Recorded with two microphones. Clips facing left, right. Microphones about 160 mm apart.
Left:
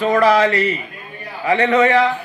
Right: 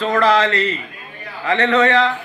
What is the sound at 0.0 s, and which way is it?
A man's voice, 10° left (ahead or behind).